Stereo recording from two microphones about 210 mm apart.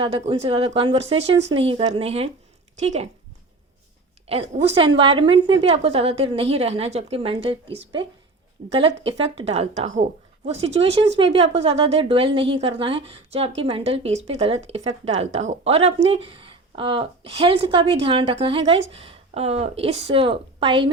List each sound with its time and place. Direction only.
0.0 s a woman's voice: 25° right (ahead or behind)
4.3 s a woman's voice: 30° right (ahead or behind)
9.0 s a woman's voice: 25° right (ahead or behind)